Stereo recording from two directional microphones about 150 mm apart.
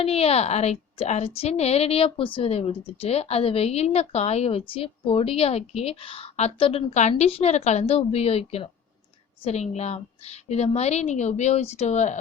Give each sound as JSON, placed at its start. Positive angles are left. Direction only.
{"t": 0.0, "sound": "a woman's voice", "side_deg": 40}